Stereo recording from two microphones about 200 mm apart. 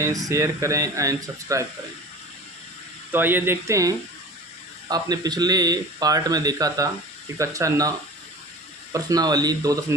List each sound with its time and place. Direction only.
0.0 s speech: 15° right (ahead or behind)
3.1 s speech: 10° right (ahead or behind)